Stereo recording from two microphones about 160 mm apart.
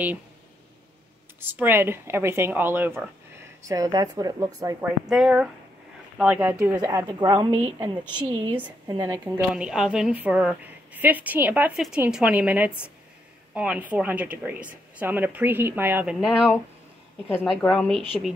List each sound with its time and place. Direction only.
1.4 s a woman's voice: 15° right (ahead or behind)
4.8 s a woman's voice: 5° right (ahead or behind); by 9.2 s 25° right (ahead or behind)
9.2 s a woman's voice: 5° right (ahead or behind)